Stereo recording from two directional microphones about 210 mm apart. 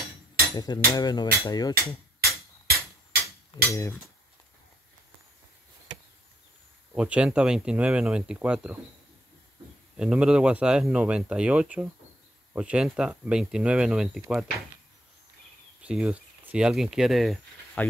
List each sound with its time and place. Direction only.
0.9 s cutlery: 20° left (ahead or behind)
2.1 s hammer: 50° right (ahead or behind)
3.7 s cutlery: 15° left (ahead or behind)
7.0 s speech: 5° right (ahead or behind)
9.9 s speech: 5° right (ahead or behind)
15.8 s speech: 5° right (ahead or behind)